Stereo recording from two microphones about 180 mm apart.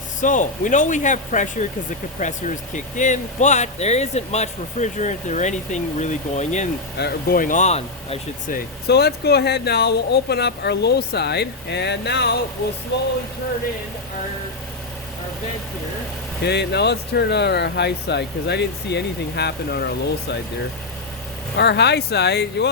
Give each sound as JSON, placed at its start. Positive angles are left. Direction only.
{"t": 0.2, "sound": "speech", "side_deg": 45}
{"t": 7.0, "sound": "speech", "side_deg": 55}
{"t": 8.5, "sound": "speech", "side_deg": 65}
{"t": 16.4, "sound": "speech", "side_deg": 65}
{"t": 21.5, "sound": "speech", "side_deg": 65}